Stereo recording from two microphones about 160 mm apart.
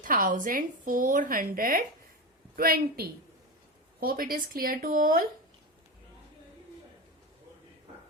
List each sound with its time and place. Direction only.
0.0 s a woman's voice: 55° right (ahead or behind)